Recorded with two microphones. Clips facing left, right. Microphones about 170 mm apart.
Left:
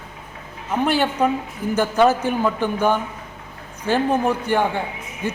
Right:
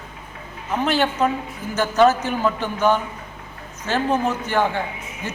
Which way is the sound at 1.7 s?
15° left (ahead or behind).